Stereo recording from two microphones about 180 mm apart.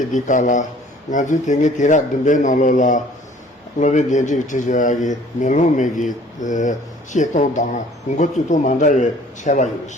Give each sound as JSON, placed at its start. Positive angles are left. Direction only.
{"t": 0.1, "sound": "speech", "side_deg": 45}